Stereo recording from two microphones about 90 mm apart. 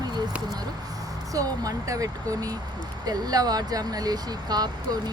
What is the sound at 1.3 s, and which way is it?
Speech, 40° right (ahead or behind).